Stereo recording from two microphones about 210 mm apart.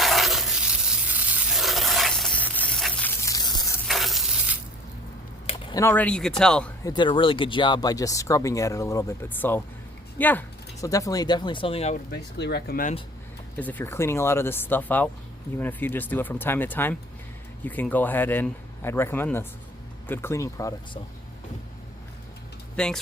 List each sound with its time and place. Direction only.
0.0 s a sound: centre (ahead or behind); by 3.8 s 20° left (ahead or behind)
3.8 s stir: centre (ahead or behind)
5.5 s a sound: 25° left (ahead or behind)
5.8 s speech: 10° left (ahead or behind)
6.8 s speech: 20° left (ahead or behind)
12.1 s speech: 50° left (ahead or behind)
13.6 s speech: 10° left (ahead or behind)
22.7 s speech: 5° left (ahead or behind)